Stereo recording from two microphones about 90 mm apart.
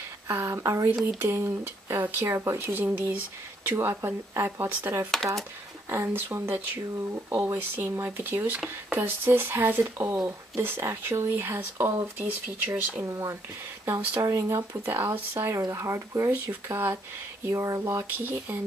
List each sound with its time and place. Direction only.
0.3 s speech: 30° right (ahead or behind)
10.0 s speech: 35° right (ahead or behind)
18.1 s speech: 20° right (ahead or behind)